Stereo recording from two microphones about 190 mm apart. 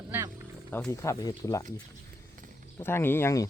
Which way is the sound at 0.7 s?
10° left (ahead or behind).